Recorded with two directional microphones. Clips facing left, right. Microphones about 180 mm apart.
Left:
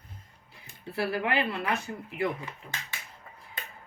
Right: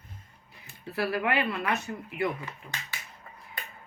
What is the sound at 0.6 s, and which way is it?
Speech, 25° left (ahead or behind).